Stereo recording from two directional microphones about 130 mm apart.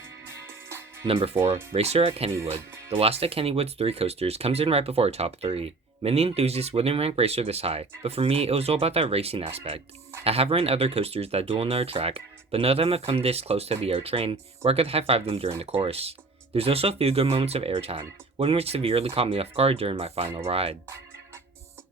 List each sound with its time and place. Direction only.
1.0 s speech: 45° right (ahead or behind)